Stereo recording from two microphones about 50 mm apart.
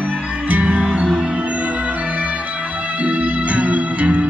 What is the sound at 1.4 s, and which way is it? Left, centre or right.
Music, right.